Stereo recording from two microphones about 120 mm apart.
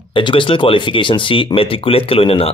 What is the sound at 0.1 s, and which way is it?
Speech, 45° left (ahead or behind).